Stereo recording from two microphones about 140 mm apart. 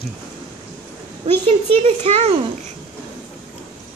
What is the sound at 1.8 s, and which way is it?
Speech, 50° right (ahead or behind).